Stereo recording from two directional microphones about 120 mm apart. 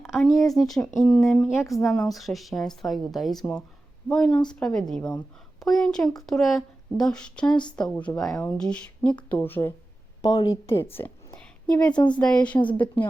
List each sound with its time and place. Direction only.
0.0 s a woman's voice: centre (ahead or behind); by 9.7 s 15° left (ahead or behind)
10.2 s a woman's voice: 35° left (ahead or behind)
11.3 s a sound: 10° left (ahead or behind)
11.9 s speech: 40° left (ahead or behind)
12.2 s a woman's voice: 10° left (ahead or behind)